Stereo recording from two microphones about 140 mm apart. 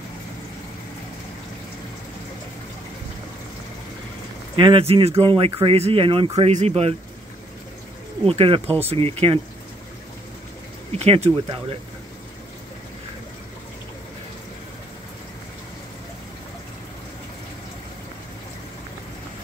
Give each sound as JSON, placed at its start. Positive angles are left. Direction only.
{"t": 4.6, "sound": "speech", "side_deg": -40}
{"t": 8.3, "sound": "speech", "side_deg": -40}
{"t": 10.9, "sound": "speech", "side_deg": -45}